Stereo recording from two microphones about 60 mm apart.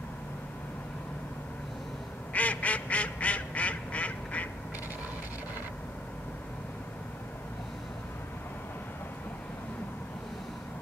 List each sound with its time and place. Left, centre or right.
2.3 s duck: left